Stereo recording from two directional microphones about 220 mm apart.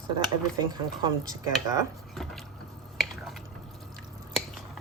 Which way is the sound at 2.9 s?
Centre (ahead or behind).